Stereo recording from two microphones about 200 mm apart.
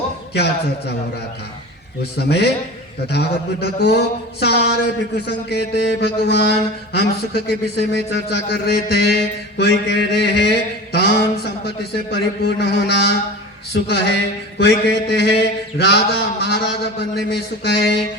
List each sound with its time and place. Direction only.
0.3 s speech: 55° left (ahead or behind)
2.1 s speech: 55° left (ahead or behind)
13.7 s a sound: 55° left (ahead or behind)
14.6 s speech: 55° left (ahead or behind)